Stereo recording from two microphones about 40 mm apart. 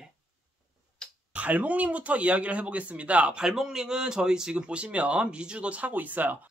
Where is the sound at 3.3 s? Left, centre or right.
Centre.